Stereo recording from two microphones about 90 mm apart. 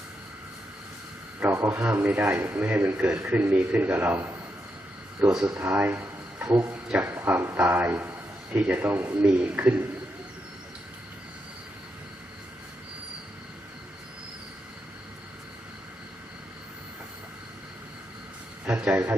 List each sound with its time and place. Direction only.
1.4 s a man's voice: 25° right (ahead or behind)
18.6 s a man's voice: 15° right (ahead or behind)